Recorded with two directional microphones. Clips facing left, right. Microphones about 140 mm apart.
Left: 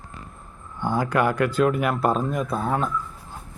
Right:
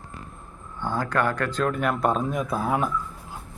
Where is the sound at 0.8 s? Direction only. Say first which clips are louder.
Left 3 dB; 15° left (ahead or behind); by 2.8 s 5° right (ahead or behind).